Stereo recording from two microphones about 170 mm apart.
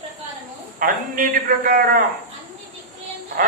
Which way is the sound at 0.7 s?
55° right (ahead or behind).